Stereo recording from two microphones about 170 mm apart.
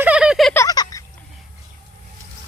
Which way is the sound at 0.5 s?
20° left (ahead or behind).